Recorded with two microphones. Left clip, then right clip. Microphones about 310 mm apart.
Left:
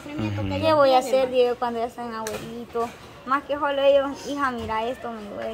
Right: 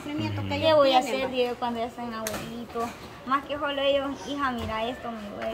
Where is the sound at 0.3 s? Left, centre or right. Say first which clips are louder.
Left 1 dB; centre.